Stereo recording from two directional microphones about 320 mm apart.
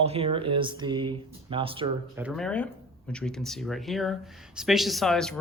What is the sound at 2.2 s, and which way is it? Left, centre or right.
Speech, centre.